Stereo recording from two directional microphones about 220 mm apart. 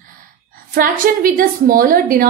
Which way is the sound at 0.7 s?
40° right (ahead or behind).